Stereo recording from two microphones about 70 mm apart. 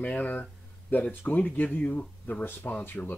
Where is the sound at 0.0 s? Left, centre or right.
Left.